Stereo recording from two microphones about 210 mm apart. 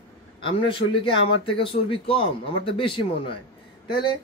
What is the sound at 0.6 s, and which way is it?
Speech, 25° left (ahead or behind).